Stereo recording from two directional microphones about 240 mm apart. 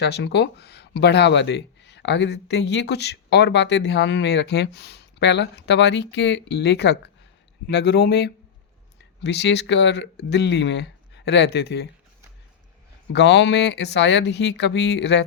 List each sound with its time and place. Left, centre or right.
0.0 s speech: left
13.1 s speech: left